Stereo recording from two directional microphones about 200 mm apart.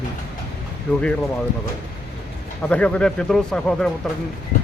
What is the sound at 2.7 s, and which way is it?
Speech, 5° left (ahead or behind).